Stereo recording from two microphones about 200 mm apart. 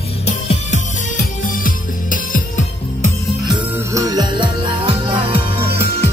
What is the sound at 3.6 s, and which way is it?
Music, 10° right (ahead or behind).